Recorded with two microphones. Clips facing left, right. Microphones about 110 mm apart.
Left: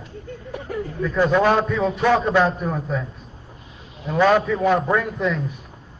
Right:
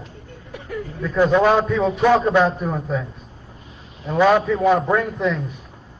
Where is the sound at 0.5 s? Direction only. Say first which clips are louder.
Left 1 dB; 35° left (ahead or behind).